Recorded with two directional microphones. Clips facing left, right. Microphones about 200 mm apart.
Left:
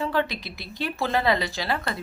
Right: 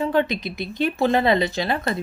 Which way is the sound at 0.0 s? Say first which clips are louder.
Right 5 dB; 20° right (ahead or behind).